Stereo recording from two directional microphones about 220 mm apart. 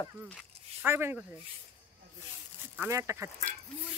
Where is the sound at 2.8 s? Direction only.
15° right (ahead or behind).